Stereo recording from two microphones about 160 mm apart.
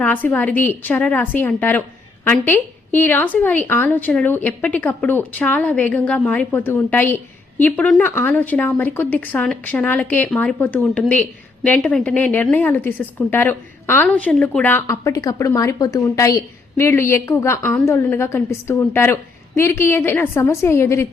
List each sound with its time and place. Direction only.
0.0 s a woman's voice: 10° left (ahead or behind)